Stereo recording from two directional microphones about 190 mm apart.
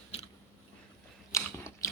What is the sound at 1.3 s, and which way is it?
Biting, 15° left (ahead or behind).